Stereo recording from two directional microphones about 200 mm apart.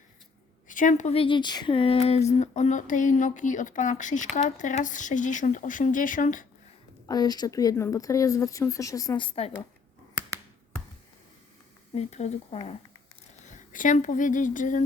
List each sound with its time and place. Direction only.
0.7 s speech: 40° left (ahead or behind)
7.1 s a woman's voice: 20° left (ahead or behind)
11.9 s speech: 35° left (ahead or behind)